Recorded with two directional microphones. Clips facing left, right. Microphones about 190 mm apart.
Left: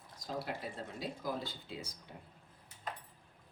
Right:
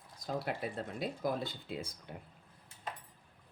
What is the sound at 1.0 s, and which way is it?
Speech, 55° right (ahead or behind).